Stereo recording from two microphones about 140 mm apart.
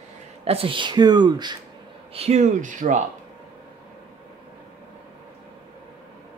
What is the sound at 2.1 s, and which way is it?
Speech, 50° right (ahead or behind).